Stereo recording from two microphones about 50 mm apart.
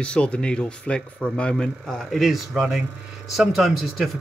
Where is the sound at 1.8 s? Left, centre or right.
Centre.